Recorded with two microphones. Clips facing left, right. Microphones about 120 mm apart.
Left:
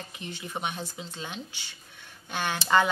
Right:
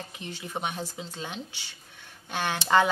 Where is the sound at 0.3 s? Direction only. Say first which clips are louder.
Right 1 dB; 40° right (ahead or behind).